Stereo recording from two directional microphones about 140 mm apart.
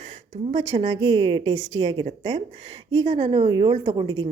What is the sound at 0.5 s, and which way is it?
A woman's voice, 50° right (ahead or behind).